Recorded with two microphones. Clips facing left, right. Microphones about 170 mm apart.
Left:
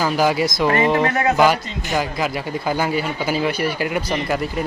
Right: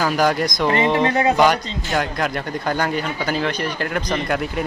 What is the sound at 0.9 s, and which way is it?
Speech, 25° right (ahead or behind).